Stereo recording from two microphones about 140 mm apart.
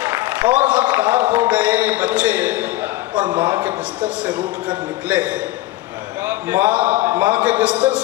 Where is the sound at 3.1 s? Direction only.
30° right (ahead or behind).